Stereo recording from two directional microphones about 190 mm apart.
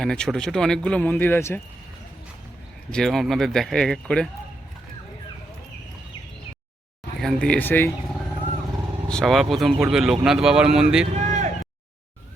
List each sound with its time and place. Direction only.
0.0 s speech: 5° left (ahead or behind)
2.9 s speech: centre (ahead or behind)
7.2 s speech: 5° left (ahead or behind)
9.0 s speech: centre (ahead or behind)
11.1 s vehicle: 35° right (ahead or behind)